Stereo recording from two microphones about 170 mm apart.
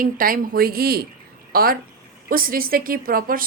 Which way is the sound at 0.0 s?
55° right (ahead or behind).